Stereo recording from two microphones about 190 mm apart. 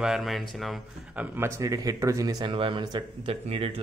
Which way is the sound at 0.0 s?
Centre (ahead or behind).